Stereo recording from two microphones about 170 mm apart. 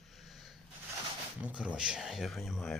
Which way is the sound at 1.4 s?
5° right (ahead or behind).